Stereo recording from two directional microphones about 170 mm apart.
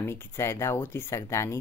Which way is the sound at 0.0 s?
15° left (ahead or behind).